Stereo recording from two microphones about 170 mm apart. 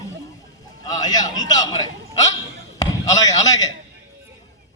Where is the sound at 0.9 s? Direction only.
20° left (ahead or behind).